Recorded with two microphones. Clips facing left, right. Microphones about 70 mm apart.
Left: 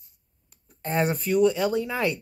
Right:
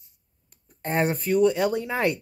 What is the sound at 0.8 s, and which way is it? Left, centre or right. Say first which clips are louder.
Speech: right 1 dB; right.